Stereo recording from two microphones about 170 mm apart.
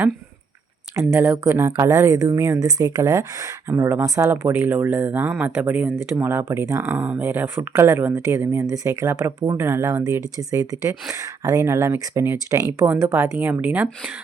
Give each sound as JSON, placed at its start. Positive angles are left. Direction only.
{"t": 0.9, "sound": "speech", "side_deg": -15}